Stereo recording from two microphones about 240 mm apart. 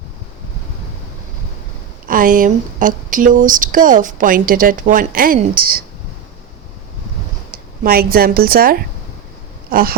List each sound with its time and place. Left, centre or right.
2.0 s speech: right
7.5 s speech: right